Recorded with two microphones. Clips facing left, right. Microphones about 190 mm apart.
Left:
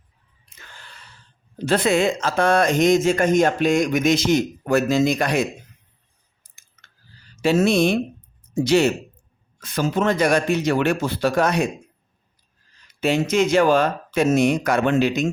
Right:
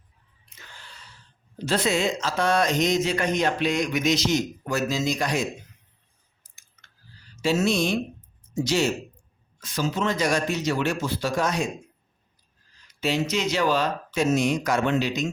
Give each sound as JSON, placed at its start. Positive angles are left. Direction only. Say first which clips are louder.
{"t": 0.8, "sound": "a sound", "louder": "left 2 dB", "side_deg": 55}
{"t": 1.6, "sound": "speech", "louder": "left 5 dB", "side_deg": 55}
{"t": 7.4, "sound": "speech", "louder": "left 5 dB", "side_deg": 55}
{"t": 13.0, "sound": "speech", "louder": "left 6 dB", "side_deg": 55}